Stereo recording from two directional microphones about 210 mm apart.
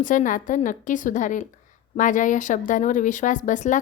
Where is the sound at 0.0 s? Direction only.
40° left (ahead or behind).